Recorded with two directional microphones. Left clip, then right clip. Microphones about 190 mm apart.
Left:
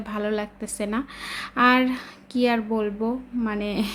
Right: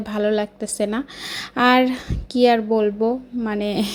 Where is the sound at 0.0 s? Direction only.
20° right (ahead or behind).